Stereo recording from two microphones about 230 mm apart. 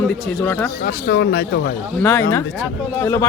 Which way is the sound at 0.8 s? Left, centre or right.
Left.